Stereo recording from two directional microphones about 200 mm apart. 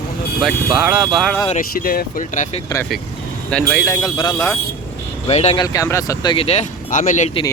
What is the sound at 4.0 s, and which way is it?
Speech, 20° left (ahead or behind).